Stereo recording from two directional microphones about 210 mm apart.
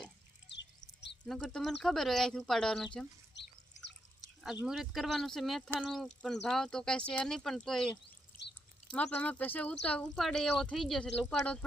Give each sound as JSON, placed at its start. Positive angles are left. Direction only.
{"t": 0.4, "sound": "a sound", "side_deg": 55}
{"t": 1.2, "sound": "speech", "side_deg": 5}
{"t": 3.3, "sound": "drip", "side_deg": 55}
{"t": 4.6, "sound": "speech", "side_deg": 0}
{"t": 8.0, "sound": "a sound", "side_deg": 55}
{"t": 8.9, "sound": "speech", "side_deg": 5}